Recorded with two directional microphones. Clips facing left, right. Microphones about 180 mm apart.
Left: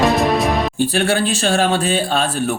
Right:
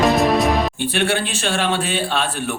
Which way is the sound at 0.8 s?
40° left (ahead or behind).